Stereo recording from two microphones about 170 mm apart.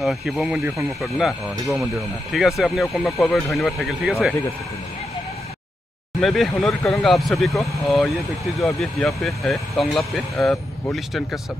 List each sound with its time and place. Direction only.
0.0 s speech: centre (ahead or behind)
0.7 s speech: 15° right (ahead or behind)
1.0 s speech: centre (ahead or behind)
6.2 s speech: centre (ahead or behind)